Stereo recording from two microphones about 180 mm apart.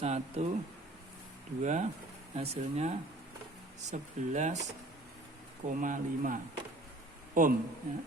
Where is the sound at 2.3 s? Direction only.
35° right (ahead or behind).